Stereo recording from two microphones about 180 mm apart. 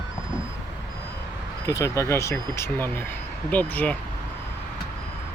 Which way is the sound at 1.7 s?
20° left (ahead or behind).